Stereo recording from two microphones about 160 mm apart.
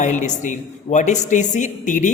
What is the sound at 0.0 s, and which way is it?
Speech, 50° left (ahead or behind).